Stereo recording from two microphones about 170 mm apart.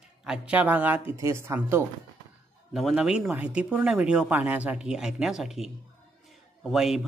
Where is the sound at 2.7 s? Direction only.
Centre (ahead or behind).